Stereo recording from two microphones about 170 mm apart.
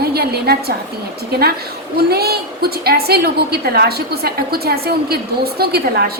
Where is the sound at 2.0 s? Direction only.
65° right (ahead or behind).